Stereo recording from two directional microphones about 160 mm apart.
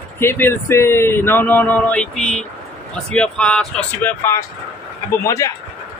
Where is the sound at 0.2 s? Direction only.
15° left (ahead or behind).